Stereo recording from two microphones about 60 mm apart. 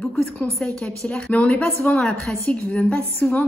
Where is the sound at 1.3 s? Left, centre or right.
Left.